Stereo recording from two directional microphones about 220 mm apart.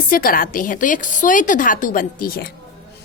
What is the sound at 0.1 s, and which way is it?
A woman's voice, 40° left (ahead or behind).